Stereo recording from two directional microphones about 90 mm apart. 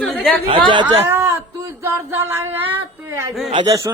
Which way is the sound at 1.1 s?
30° right (ahead or behind).